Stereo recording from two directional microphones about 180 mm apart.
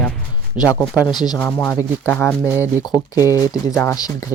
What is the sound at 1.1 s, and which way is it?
Speech, 25° left (ahead or behind).